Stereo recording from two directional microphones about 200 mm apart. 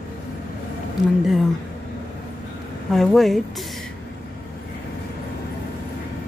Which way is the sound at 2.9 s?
Centre (ahead or behind).